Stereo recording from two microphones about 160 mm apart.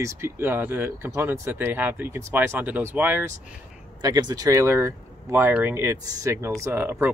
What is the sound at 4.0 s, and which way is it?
Speech, 25° right (ahead or behind).